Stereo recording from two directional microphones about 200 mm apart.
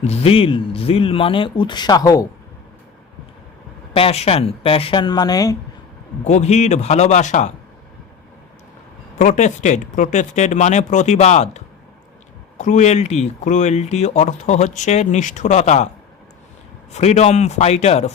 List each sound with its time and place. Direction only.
0.0 s speech: 30° left (ahead or behind)
3.9 s speech: 30° left (ahead or behind)
6.2 s speech: 35° left (ahead or behind)
9.1 s speech: 40° left (ahead or behind)
16.9 s speech: 35° left (ahead or behind)